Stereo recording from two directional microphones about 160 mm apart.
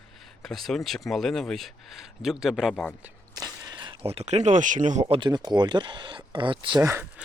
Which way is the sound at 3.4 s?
25° right (ahead or behind).